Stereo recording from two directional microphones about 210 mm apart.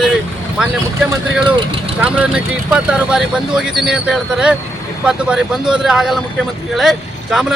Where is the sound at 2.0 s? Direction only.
5° right (ahead or behind).